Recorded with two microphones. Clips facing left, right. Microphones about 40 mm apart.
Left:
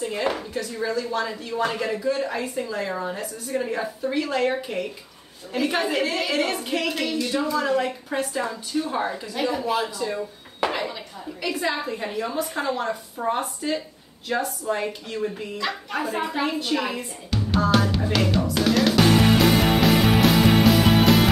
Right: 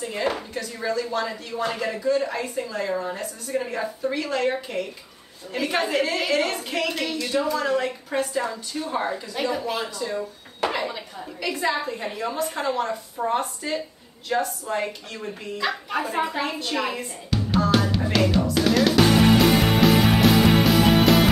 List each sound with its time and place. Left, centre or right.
0.0 s a woman's voice: centre
2.0 s a woman's voice: centre
2.3 s a woman's voice: centre
16.7 s music: centre